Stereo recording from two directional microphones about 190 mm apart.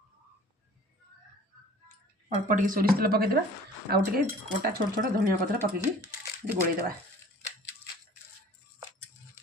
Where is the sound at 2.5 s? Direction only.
45° right (ahead or behind).